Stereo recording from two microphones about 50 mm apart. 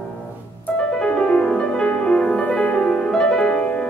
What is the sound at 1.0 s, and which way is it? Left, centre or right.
Music, left.